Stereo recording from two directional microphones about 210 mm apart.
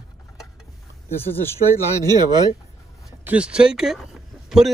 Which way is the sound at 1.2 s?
10° left (ahead or behind).